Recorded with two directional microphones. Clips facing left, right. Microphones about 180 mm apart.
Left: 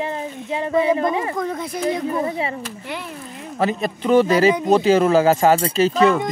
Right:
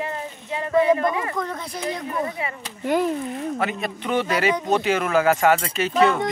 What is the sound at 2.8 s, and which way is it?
Speech, 45° right (ahead or behind).